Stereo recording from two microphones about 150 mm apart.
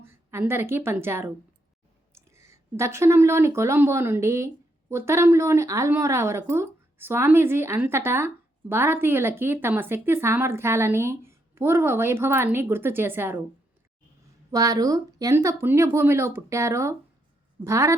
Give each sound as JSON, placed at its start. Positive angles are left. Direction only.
{"t": 0.0, "sound": "a woman's voice", "side_deg": -15}
{"t": 14.5, "sound": "speech", "side_deg": -25}